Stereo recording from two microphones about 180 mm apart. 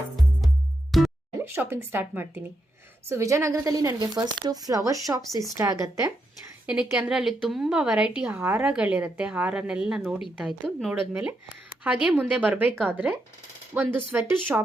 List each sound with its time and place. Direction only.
0.4 s music: centre (ahead or behind)
1.5 s a woman's voice: 10° right (ahead or behind)
6.7 s a woman's voice: 5° right (ahead or behind)